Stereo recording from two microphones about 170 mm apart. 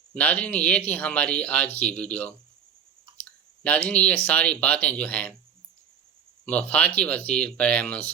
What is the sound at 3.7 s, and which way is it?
Speech, 10° left (ahead or behind).